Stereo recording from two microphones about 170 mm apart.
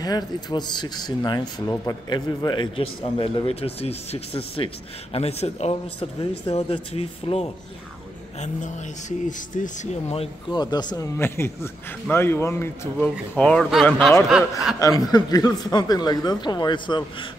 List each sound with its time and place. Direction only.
0.0 s speech: 25° left (ahead or behind)
8.4 s speech: 45° left (ahead or behind); by 11.1 s 25° left (ahead or behind)
11.1 s a man's voice: 15° left (ahead or behind)
14.8 s speech: 20° left (ahead or behind)